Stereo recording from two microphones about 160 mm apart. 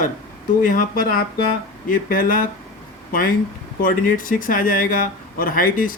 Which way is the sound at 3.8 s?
60° left (ahead or behind).